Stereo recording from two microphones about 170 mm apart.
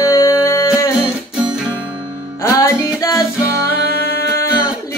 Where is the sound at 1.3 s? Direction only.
5° right (ahead or behind).